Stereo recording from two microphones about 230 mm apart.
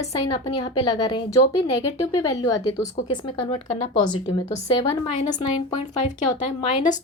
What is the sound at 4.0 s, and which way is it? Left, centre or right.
Speech, centre.